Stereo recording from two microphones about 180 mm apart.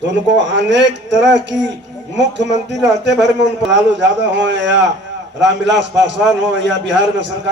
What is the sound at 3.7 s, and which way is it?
A man's voice, 80° right.